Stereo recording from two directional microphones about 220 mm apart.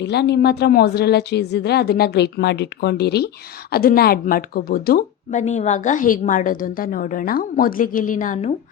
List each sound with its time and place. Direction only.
0.0 s speech: 50° left (ahead or behind)